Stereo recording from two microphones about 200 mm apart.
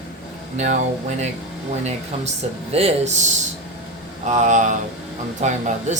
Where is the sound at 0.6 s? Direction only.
35° right (ahead or behind).